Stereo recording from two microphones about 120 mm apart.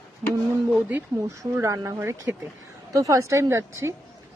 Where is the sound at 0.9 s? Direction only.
15° right (ahead or behind).